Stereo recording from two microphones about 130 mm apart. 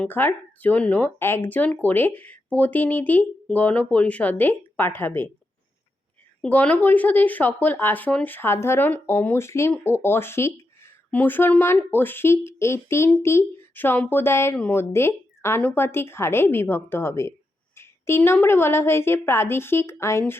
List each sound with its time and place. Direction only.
0.0 s speech: 15° left (ahead or behind)
6.4 s a woman's voice: 10° left (ahead or behind)